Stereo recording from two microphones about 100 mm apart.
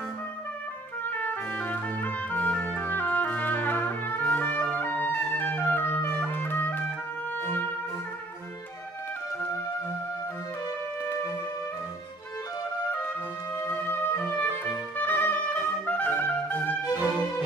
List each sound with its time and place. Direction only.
1.1 s trumpet: 15° left (ahead or behind)
7.3 s music: 20° left (ahead or behind)
13.6 s music: 20° left (ahead or behind)